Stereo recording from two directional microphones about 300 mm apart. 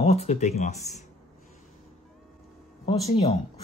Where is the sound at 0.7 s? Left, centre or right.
Centre.